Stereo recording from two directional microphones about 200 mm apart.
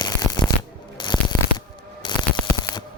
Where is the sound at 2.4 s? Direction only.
5° left (ahead or behind).